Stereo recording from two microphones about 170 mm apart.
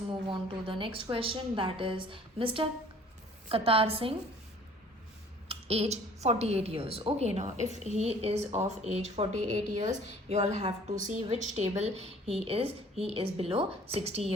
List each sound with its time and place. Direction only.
0.1 s a woman's voice: 30° right (ahead or behind)
5.5 s a woman's voice: 35° right (ahead or behind)